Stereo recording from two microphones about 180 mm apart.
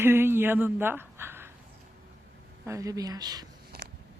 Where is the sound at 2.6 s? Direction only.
15° right (ahead or behind).